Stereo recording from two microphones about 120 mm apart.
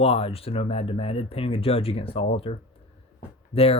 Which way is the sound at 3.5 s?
55° left (ahead or behind).